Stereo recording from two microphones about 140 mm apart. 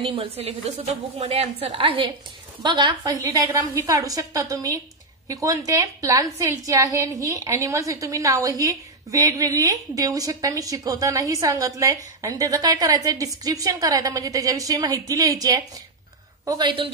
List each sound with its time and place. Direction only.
0.1 s a woman's voice: 45° right (ahead or behind)